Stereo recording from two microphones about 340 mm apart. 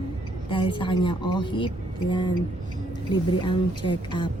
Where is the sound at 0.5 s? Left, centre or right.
Centre.